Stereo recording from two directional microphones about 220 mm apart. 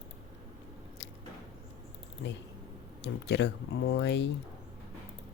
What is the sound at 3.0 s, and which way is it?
Speech, 50° left (ahead or behind).